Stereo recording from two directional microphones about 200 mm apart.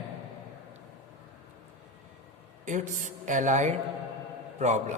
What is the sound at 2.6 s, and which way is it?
A woman's voice, 40° right (ahead or behind).